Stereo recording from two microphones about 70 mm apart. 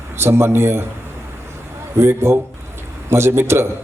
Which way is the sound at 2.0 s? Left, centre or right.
Right.